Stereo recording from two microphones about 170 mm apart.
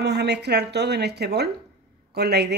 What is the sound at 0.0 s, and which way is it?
A woman's voice, 80° right.